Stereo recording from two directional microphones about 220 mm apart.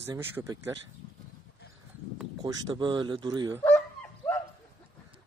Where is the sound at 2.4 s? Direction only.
20° right (ahead or behind).